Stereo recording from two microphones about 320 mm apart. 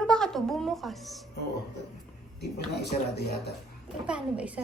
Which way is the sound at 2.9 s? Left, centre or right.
Left.